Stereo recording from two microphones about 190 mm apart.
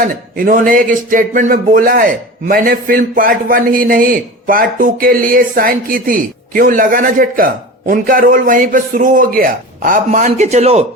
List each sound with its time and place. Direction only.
0.0 s speech: 45° right (ahead or behind)